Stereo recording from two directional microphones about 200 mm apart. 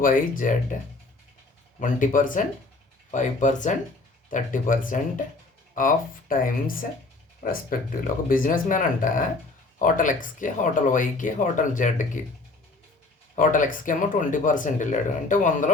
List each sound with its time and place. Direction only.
0.0 s speech: 40° left (ahead or behind)
1.8 s speech: 40° left (ahead or behind)
13.3 s speech: 40° left (ahead or behind)